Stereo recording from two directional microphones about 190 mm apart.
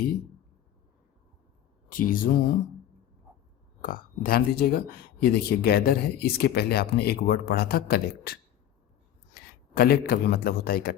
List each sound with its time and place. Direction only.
1.9 s speech: 50° left (ahead or behind)
3.8 s a man's voice: 50° left (ahead or behind)